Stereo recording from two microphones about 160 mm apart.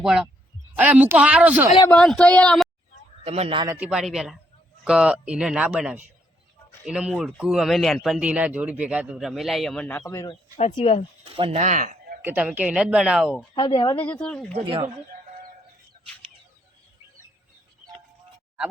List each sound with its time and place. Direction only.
0.0 s a man's voice: 5° right (ahead or behind)
1.9 s a man's voice: 5° left (ahead or behind)
3.2 s a man's voice: 40° right (ahead or behind)
3.7 s a man's voice: 5° right (ahead or behind)
10.1 s speech: 20° left (ahead or behind)
10.8 s speech: 40° left (ahead or behind)
11.2 s speech: 40° right (ahead or behind)
11.6 s speech: 50° right (ahead or behind)
12.2 s speech: 10° right (ahead or behind)
13.5 s speech: 30° left (ahead or behind)
14.1 s a man's voice: 5° left (ahead or behind)
14.5 s a man's voice: 30° right (ahead or behind)